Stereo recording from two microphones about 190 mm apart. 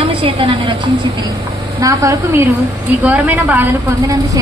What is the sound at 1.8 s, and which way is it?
A woman's voice, 15° right (ahead or behind).